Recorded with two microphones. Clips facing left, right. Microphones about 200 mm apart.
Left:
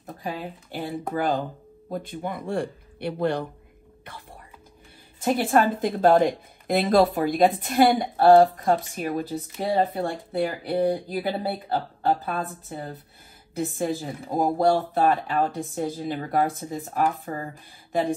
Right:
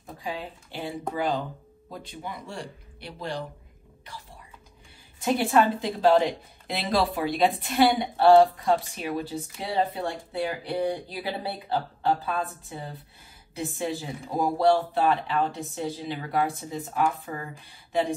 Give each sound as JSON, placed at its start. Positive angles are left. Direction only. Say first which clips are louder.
{"t": 0.0, "sound": "speech", "louder": "left 2 dB", "side_deg": 50}
{"t": 4.0, "sound": "whispering", "louder": "left 1 dB", "side_deg": 55}
{"t": 5.2, "sound": "speech", "louder": "left 1 dB", "side_deg": 50}